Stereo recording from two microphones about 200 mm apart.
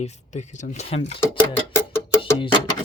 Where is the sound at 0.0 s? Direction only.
35° left (ahead or behind).